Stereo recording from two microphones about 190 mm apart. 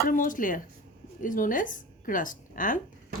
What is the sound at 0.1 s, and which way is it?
A woman's voice, 45° left (ahead or behind).